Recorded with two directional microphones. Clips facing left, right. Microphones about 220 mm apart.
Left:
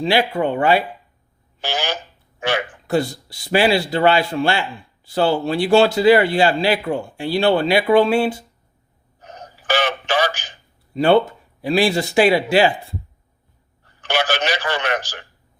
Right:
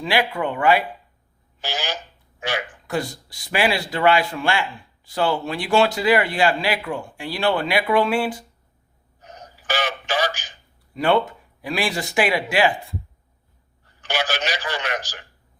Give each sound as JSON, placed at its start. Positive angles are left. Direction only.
{"t": 0.0, "sound": "speech", "side_deg": 30}
{"t": 1.6, "sound": "speech", "side_deg": 60}
{"t": 2.9, "sound": "speech", "side_deg": 25}
{"t": 9.6, "sound": "speech", "side_deg": 60}
{"t": 10.9, "sound": "speech", "side_deg": 30}
{"t": 14.0, "sound": "a man's voice", "side_deg": 55}